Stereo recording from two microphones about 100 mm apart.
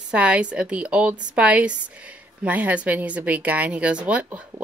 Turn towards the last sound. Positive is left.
turn(degrees=-15)  # may be behind; listen again after turning